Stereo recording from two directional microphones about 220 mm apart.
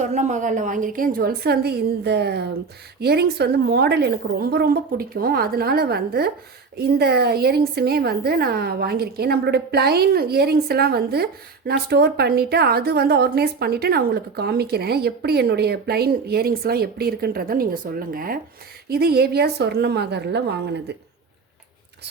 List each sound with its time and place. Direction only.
0.0 s a woman's voice: 35° right (ahead or behind); by 20.9 s 50° right (ahead or behind)